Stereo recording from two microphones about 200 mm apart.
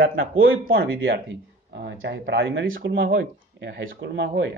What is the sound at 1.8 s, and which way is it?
Speech, 55° right (ahead or behind).